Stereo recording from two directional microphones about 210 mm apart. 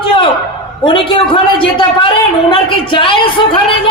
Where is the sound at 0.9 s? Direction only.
25° left (ahead or behind).